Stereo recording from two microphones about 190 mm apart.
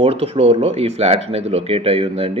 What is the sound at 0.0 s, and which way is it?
Speech, 30° right (ahead or behind).